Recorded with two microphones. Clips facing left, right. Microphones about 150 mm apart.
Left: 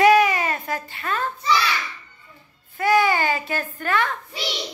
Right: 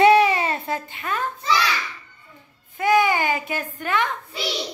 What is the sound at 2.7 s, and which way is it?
Baby cry, 20° right (ahead or behind).